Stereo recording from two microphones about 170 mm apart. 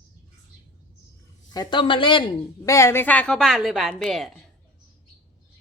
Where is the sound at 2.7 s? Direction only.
15° left (ahead or behind); by 4.4 s centre (ahead or behind).